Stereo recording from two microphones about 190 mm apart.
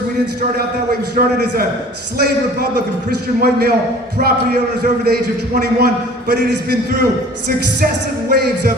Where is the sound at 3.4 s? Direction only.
55° right (ahead or behind).